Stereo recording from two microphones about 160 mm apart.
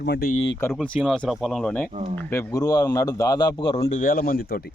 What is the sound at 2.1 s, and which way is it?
A man's voice, 15° left (ahead or behind).